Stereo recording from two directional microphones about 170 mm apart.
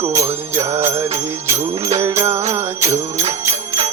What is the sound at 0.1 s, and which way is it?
Jingle bell, 15° right (ahead or behind).